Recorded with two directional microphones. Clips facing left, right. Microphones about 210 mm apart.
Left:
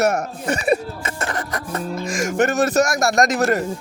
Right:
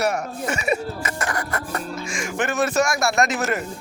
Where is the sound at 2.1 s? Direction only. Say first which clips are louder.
Left 6 dB; 45° left (ahead or behind).